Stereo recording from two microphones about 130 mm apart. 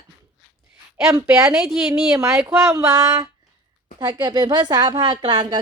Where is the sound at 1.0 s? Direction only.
25° right (ahead or behind).